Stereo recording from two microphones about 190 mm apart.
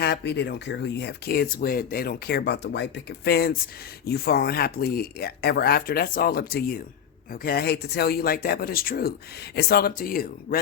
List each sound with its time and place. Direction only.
0.0 s speech: 60° left (ahead or behind)